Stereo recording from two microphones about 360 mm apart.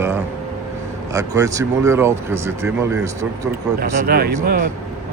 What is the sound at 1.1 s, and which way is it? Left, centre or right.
Speech, centre.